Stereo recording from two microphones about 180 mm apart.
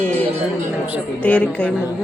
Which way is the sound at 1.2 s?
5° left (ahead or behind).